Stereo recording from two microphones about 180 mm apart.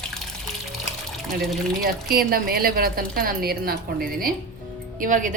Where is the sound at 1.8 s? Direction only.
55° right (ahead or behind).